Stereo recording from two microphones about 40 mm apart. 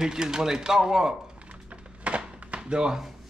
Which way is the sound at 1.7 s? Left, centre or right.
Right.